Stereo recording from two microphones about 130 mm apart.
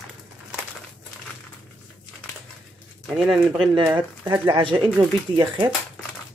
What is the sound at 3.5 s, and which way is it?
Speech, 35° right (ahead or behind).